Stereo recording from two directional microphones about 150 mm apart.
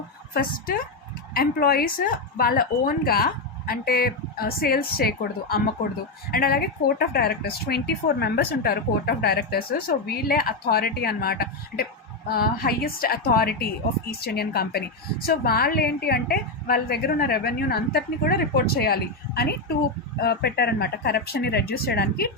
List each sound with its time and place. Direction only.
1.3 s speech: 85° left